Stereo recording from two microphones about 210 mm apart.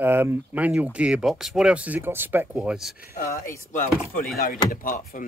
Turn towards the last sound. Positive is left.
turn(degrees=40)  # may be behind; listen again after turning